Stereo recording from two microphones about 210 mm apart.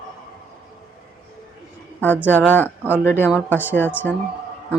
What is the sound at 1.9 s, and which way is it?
Speech, 10° left (ahead or behind).